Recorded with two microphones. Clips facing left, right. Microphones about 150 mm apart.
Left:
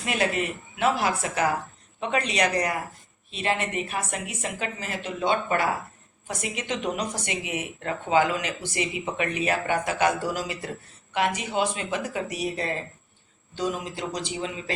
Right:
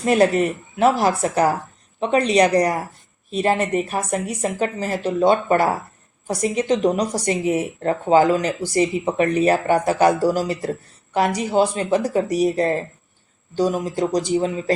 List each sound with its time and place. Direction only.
0.0 s speech: 40° right (ahead or behind)